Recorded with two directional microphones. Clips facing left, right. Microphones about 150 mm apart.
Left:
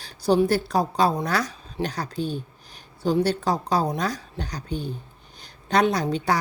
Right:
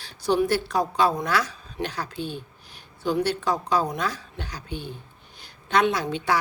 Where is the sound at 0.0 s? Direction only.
35° left (ahead or behind).